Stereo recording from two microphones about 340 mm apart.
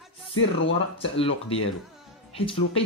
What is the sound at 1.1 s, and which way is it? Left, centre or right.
Speech, centre.